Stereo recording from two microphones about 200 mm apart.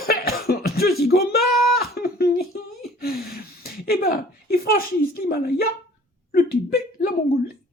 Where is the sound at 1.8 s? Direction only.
50° left (ahead or behind).